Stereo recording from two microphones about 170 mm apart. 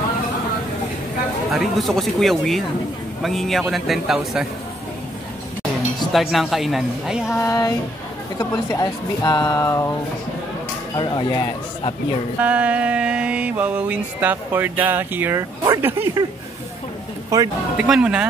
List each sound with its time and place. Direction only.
1.5 s speech: centre (ahead or behind)
6.1 s speech: centre (ahead or behind)
7.2 s speech: 15° left (ahead or behind)
11.0 s speech: 25° left (ahead or behind)
12.4 s mantra: 10° right (ahead or behind)
17.3 s speech: 20° right (ahead or behind)
17.7 s mantra: 5° right (ahead or behind)